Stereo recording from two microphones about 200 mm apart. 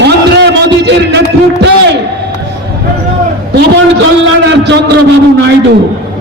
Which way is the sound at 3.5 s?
65° right (ahead or behind).